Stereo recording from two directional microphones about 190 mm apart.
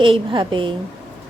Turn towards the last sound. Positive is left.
turn(degrees=-25)  # may be behind; listen again after turning